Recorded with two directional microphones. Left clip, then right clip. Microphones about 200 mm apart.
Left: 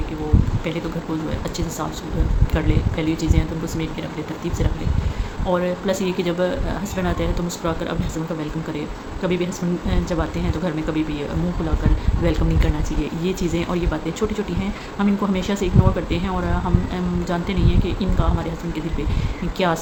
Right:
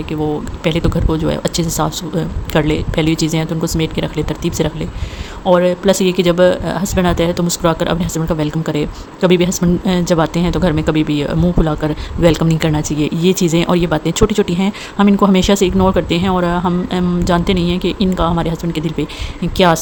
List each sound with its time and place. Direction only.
0.6 s speech: 55° right (ahead or behind)